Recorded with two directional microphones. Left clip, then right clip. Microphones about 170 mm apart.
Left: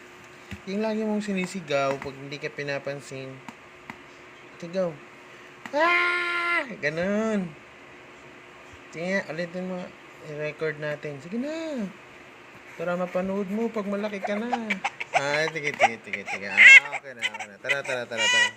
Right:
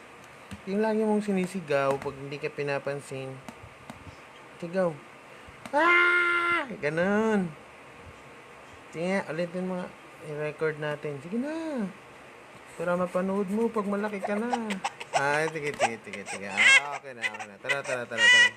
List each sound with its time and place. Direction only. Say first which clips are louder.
0.7 s speech: right 2 dB; 15° right (ahead or behind)
4.6 s speech: even; 15° right (ahead or behind)
9.0 s speech: left 1 dB; 15° right (ahead or behind)
12.8 s speech: even; 5° right (ahead or behind)
14.7 s chicken: left 4 dB; 20° right (ahead or behind)
15.2 s speech: right 1 dB; 5° right (ahead or behind)
16.1 s speech: left 7 dB; 20° right (ahead or behind); by 18.2 s centre (ahead or behind)
18.2 s speech: right 3 dB; 15° right (ahead or behind)